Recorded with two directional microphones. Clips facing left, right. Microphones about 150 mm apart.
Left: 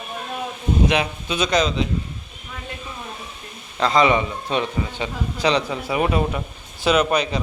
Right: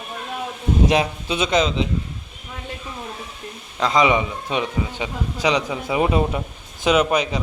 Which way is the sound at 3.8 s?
10° right (ahead or behind).